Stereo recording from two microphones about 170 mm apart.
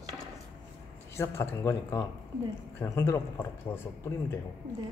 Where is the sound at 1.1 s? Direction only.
15° left (ahead or behind).